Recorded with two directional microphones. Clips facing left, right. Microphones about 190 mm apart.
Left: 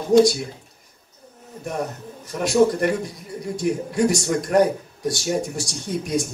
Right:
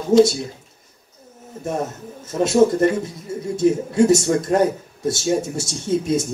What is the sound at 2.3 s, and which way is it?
Speech, 25° right (ahead or behind).